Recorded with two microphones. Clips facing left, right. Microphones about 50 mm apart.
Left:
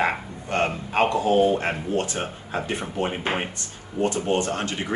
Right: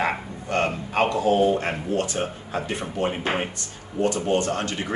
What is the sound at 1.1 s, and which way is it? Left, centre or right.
Speech, centre.